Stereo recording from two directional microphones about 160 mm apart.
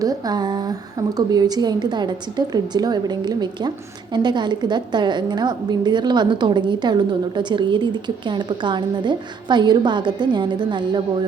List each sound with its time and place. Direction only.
0.0 s a woman's voice: 25° right (ahead or behind)